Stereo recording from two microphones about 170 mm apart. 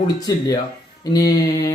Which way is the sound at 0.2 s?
20° left (ahead or behind).